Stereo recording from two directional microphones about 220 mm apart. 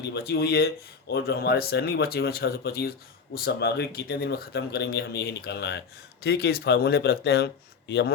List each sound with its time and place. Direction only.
0.0 s speech: 50° left (ahead or behind)